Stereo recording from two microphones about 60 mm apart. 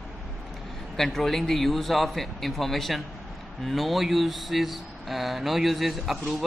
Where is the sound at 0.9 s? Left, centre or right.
Centre.